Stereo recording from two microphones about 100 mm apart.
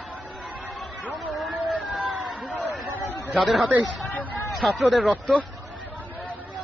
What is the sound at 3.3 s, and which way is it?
A man's voice, centre (ahead or behind).